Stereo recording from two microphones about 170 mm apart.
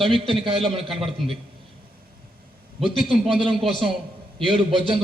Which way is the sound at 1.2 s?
Centre (ahead or behind).